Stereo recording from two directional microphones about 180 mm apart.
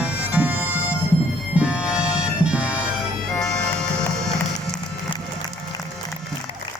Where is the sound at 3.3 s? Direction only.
5° left (ahead or behind).